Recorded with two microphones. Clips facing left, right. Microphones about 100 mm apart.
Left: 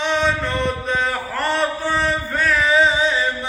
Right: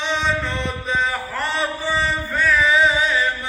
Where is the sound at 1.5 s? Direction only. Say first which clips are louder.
Left 1 dB; 60° left (ahead or behind).